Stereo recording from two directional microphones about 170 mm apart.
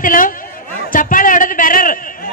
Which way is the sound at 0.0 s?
55° left (ahead or behind).